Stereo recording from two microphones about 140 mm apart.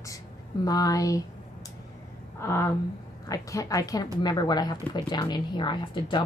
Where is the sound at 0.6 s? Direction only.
25° left (ahead or behind).